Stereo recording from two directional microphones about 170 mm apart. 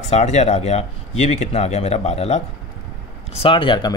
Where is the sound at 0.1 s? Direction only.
40° left (ahead or behind).